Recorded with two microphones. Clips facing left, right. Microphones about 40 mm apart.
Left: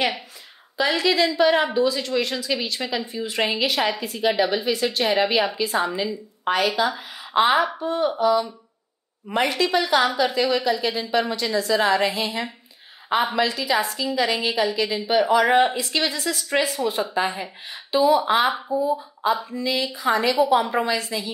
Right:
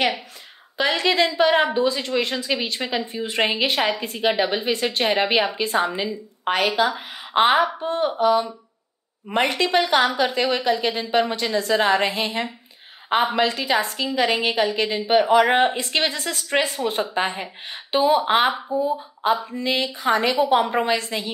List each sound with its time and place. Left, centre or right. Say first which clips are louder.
0.7 s a woman's voice: even; right